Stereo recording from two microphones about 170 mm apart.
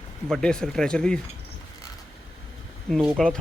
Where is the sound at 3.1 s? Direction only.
5° left (ahead or behind).